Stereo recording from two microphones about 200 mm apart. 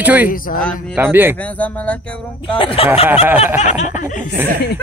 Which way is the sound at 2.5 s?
25° left (ahead or behind).